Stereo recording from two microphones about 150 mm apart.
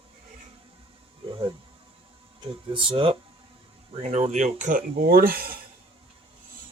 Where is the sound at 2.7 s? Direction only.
40° right (ahead or behind); by 5.5 s 85° right.